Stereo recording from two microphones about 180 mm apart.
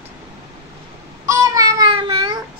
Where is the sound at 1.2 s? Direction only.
20° right (ahead or behind).